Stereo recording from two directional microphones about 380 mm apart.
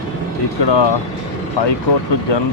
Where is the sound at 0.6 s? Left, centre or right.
Left.